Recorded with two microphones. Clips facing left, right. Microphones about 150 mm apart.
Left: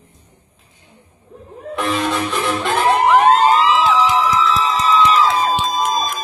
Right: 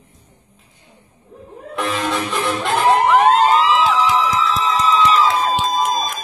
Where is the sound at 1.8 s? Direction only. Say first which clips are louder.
Left 1 dB; centre (ahead or behind).